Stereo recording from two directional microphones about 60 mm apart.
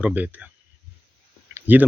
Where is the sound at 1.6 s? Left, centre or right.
Right.